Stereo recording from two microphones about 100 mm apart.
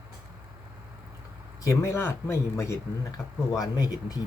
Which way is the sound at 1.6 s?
30° left (ahead or behind).